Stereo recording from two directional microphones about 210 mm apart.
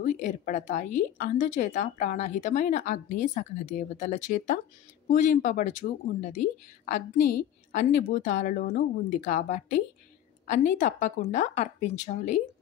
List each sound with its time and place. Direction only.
0.0 s a woman's voice: 35° left (ahead or behind)